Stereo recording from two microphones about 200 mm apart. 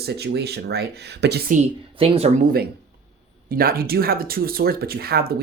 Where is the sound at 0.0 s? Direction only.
55° right (ahead or behind).